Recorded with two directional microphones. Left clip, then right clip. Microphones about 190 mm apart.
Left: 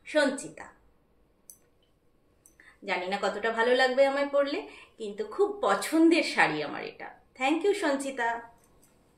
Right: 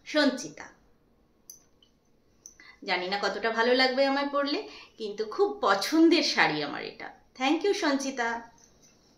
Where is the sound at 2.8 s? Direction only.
15° right (ahead or behind).